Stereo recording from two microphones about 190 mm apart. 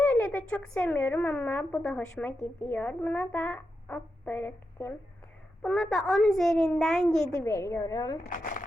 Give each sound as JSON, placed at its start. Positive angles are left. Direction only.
{"t": 0.0, "sound": "a child's voice", "side_deg": 5}
{"t": 7.4, "sound": "speech", "side_deg": 15}
{"t": 8.3, "sound": "speech", "side_deg": 45}